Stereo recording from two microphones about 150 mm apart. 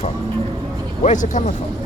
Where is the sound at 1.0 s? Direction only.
55° left (ahead or behind).